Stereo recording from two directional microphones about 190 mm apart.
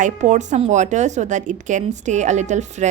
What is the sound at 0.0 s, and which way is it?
A woman's voice, 40° right (ahead or behind).